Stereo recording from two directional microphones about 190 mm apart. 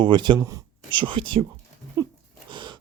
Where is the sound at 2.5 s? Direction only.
25° right (ahead or behind).